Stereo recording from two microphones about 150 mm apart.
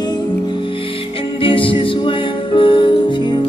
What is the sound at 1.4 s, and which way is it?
Music, 35° left (ahead or behind).